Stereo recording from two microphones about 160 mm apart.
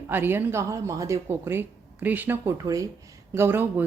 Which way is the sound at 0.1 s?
10° right (ahead or behind).